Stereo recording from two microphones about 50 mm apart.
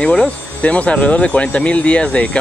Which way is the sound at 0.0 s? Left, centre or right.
Left.